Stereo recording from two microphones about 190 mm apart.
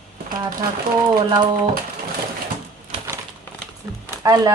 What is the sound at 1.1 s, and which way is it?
Speech, 20° right (ahead or behind).